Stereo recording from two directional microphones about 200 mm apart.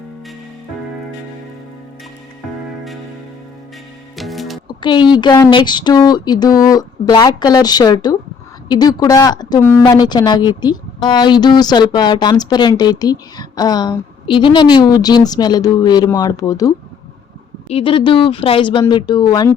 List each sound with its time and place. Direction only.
4.2 s music: centre (ahead or behind)
4.8 s a woman's voice: 20° left (ahead or behind)
17.7 s a woman's voice: 30° left (ahead or behind)